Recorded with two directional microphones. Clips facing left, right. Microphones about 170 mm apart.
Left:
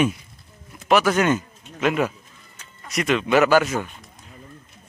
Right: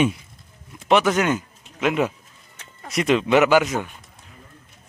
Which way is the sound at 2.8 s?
25° right (ahead or behind).